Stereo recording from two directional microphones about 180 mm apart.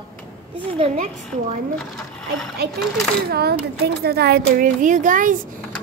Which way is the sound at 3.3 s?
60° right (ahead or behind).